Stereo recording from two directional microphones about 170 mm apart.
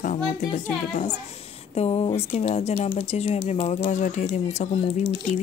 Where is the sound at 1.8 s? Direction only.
40° left (ahead or behind).